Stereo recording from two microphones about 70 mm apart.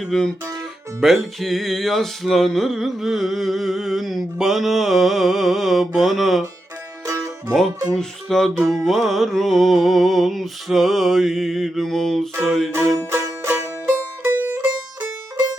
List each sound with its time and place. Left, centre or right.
0.0 s music: centre
7.0 s music: right
7.9 s music: centre
13.8 s music: right